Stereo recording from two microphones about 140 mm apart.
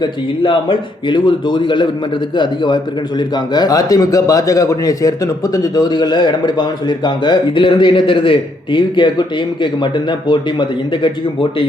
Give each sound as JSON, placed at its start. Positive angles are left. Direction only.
{"t": 0.0, "sound": "a man's voice", "side_deg": 35}